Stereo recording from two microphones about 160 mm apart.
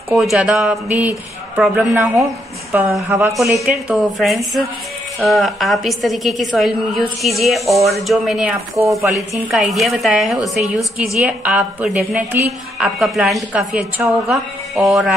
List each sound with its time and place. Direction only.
0.1 s a woman's voice: 5° right (ahead or behind)
3.9 s a woman's voice: centre (ahead or behind)
9.5 s a woman's voice: centre (ahead or behind)